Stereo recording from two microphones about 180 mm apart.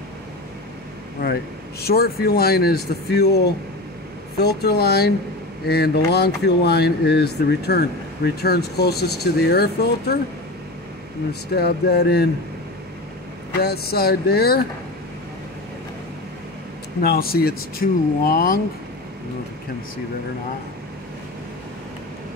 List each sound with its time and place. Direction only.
1.9 s speech: 60° left (ahead or behind)
4.4 s speech: 65° left (ahead or behind)
11.5 s speech: 65° left (ahead or behind)
13.6 s speech: 60° left (ahead or behind)
17.0 s speech: 60° left (ahead or behind)